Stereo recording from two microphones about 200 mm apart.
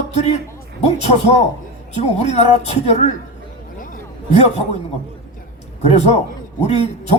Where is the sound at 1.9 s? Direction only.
30° left (ahead or behind).